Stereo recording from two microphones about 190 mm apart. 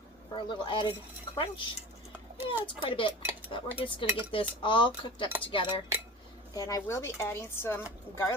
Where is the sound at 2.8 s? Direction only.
25° left (ahead or behind).